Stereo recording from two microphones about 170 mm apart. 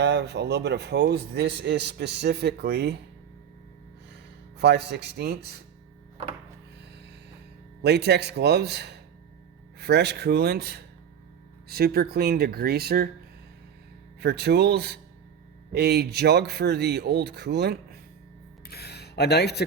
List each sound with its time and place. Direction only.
0.0 s a man's voice: 85° right
4.5 s speech: 75° right (ahead or behind)
7.8 s speech: 75° right (ahead or behind)
14.2 s speech: 75° right (ahead or behind)
18.7 s speech: 70° left (ahead or behind)